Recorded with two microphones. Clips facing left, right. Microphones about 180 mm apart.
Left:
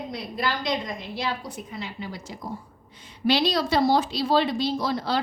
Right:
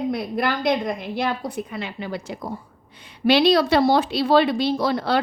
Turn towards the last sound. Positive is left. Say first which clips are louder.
# right 5 dB
turn(degrees=-65)  # may be behind; listen again after turning